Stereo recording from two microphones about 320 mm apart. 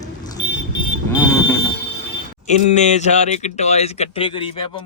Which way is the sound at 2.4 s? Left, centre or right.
Left.